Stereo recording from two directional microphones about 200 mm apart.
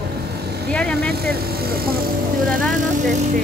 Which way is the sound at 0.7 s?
5° left (ahead or behind).